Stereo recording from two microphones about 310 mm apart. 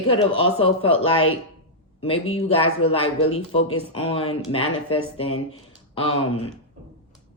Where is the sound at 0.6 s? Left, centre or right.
Centre.